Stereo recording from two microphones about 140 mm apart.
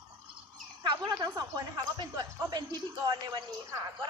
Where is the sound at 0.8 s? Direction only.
30° right (ahead or behind).